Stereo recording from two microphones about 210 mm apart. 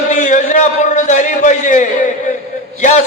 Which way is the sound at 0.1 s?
35° left (ahead or behind).